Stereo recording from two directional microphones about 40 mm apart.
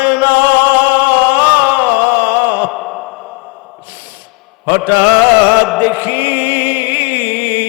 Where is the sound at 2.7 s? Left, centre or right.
Centre.